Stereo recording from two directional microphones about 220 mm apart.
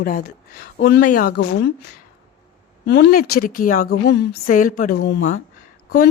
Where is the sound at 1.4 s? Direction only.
60° left (ahead or behind).